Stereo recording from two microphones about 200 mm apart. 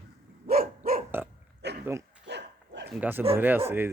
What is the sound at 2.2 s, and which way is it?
Dog, 60° right (ahead or behind).